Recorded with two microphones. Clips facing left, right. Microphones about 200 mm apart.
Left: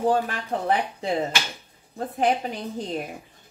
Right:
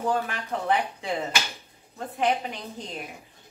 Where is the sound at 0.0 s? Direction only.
35° left (ahead or behind).